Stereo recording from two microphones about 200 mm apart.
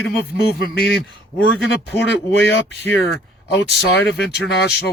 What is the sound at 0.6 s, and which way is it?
A man's voice, 50° left (ahead or behind).